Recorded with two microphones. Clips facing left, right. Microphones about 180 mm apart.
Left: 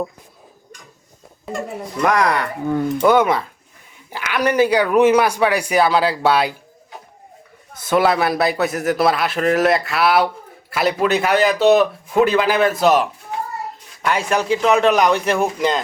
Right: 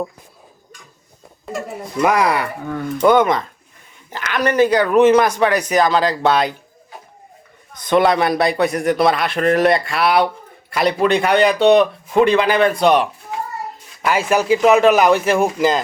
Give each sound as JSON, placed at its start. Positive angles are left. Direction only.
{"t": 1.5, "sound": "speech", "side_deg": -5}
{"t": 3.0, "sound": "speech", "side_deg": 5}
{"t": 7.7, "sound": "a man's voice", "side_deg": 5}